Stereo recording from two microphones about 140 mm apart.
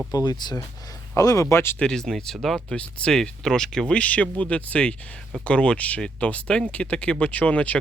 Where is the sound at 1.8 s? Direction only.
5° left (ahead or behind).